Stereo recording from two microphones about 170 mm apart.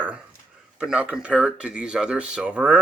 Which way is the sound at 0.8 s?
5° right (ahead or behind).